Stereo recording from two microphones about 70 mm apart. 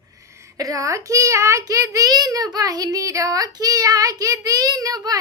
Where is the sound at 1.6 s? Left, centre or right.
Right.